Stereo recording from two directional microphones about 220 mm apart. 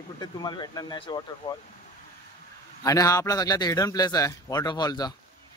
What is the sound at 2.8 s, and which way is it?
A man's voice, 15° left (ahead or behind).